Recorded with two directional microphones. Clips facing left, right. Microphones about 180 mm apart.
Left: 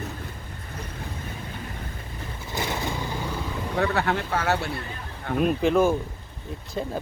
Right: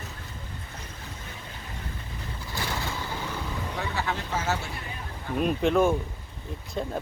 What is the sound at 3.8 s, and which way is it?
Speech, 60° left (ahead or behind).